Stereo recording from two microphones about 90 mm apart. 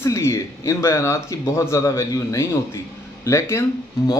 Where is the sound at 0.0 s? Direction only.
30° left (ahead or behind).